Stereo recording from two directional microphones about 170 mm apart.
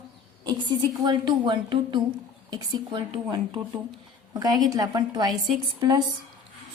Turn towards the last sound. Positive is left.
turn(degrees=-25)  # may be behind; listen again after turning